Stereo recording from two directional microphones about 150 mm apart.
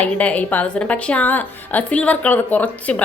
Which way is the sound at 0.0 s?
10° left (ahead or behind).